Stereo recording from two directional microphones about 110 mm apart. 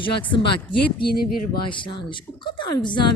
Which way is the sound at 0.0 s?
50° left (ahead or behind).